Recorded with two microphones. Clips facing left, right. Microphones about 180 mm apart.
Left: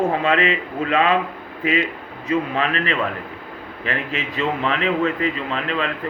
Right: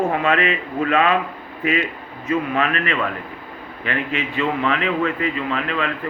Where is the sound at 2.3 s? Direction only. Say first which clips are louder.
Right 1 dB; 30° left (ahead or behind).